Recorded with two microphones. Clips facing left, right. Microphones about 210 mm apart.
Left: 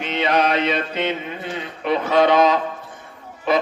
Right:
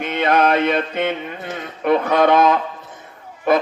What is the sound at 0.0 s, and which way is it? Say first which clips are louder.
Mantra: right 3 dB; 50° right (ahead or behind).